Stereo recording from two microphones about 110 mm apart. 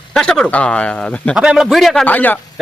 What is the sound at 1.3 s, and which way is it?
Speech, 5° right (ahead or behind).